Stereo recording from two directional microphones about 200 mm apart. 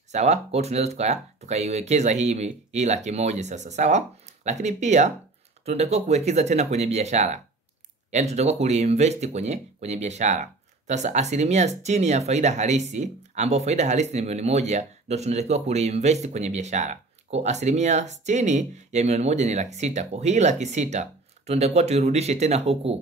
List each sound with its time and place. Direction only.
0.1 s speech: 35° right (ahead or behind)